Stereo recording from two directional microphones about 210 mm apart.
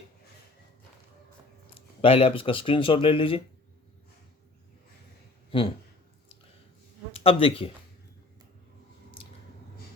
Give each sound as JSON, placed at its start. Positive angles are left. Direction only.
{"t": 2.0, "sound": "speech", "side_deg": 25}
{"t": 5.5, "sound": "speech", "side_deg": 25}
{"t": 7.1, "sound": "speech", "side_deg": 25}